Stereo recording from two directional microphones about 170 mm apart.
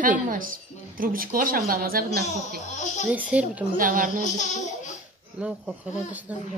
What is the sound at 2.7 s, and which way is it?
Speech, 45° left (ahead or behind).